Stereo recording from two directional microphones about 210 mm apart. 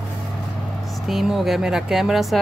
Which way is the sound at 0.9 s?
Centre (ahead or behind).